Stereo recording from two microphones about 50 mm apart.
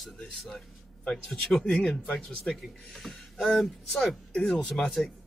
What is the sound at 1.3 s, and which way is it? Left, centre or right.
Speech, centre.